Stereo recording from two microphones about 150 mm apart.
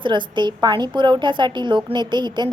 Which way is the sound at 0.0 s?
30° right (ahead or behind).